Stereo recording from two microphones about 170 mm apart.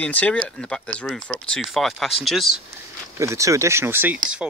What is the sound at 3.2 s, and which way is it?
Speech, 20° right (ahead or behind).